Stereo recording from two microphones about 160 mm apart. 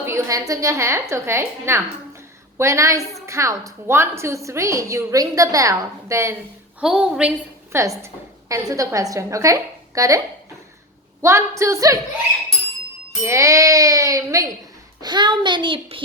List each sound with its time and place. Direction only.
0.0 s a woman's voice: 15° right (ahead or behind)
6.7 s a woman's voice: 5° right (ahead or behind)
11.2 s a woman's voice: 15° right (ahead or behind)
13.2 s a woman's voice: 20° right (ahead or behind)